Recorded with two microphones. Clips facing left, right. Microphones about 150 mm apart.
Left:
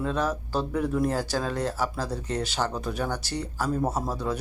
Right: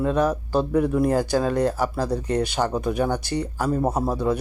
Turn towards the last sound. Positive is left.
turn(degrees=-15)  # may be behind; listen again after turning